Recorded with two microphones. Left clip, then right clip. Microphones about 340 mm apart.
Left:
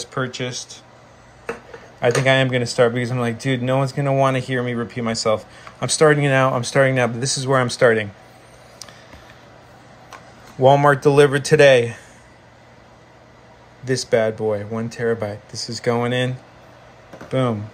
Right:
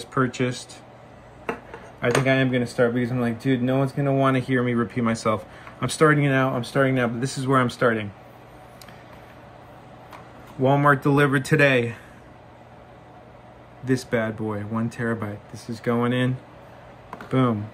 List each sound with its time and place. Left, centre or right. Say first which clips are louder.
0.0 s speech: right 1 dB; centre
2.0 s speech: left 5 dB; centre
2.6 s speech: left 5 dB; left
3.3 s speech: left 2 dB; centre
3.7 s speech: left 3 dB; left
4.2 s speech: left 3 dB; centre
10.7 s speech: left 5 dB; centre
13.8 s speech: left 6 dB; centre